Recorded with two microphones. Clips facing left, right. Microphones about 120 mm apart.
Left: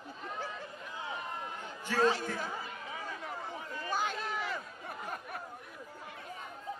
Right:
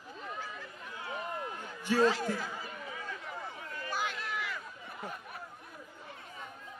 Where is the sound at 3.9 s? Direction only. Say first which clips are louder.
Left 2 dB; 35° left (ahead or behind).